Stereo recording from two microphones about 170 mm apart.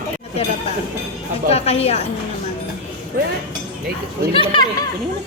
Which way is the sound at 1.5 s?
35° left (ahead or behind).